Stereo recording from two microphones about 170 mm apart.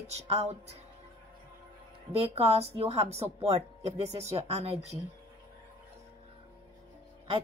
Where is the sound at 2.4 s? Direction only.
40° right (ahead or behind).